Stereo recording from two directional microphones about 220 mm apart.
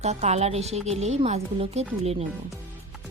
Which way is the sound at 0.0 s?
30° right (ahead or behind).